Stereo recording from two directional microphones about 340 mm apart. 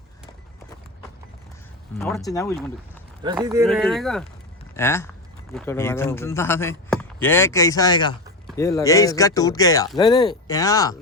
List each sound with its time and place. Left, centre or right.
2.0 s speech: centre
3.2 s speech: centre